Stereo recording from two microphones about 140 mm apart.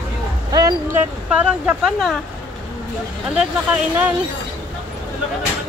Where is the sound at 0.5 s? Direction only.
25° right (ahead or behind).